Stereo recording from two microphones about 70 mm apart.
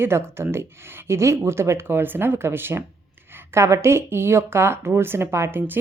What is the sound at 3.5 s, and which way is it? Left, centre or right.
Speech, right.